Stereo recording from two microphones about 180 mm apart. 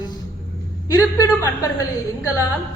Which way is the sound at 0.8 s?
20° left (ahead or behind).